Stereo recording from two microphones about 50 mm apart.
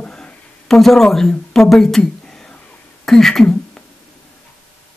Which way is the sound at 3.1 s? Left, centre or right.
Centre.